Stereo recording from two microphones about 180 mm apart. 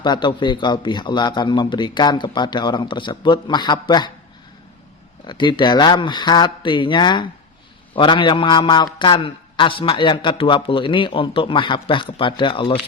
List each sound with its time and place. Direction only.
0.0 s a man's voice: 25° left (ahead or behind)
5.2 s a man's voice: 25° left (ahead or behind)